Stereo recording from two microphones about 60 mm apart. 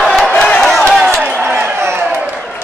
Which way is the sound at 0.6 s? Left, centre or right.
Centre.